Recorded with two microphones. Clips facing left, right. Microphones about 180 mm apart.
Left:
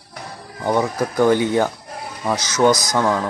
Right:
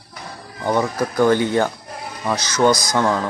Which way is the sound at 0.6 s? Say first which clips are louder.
Even; 10° left (ahead or behind).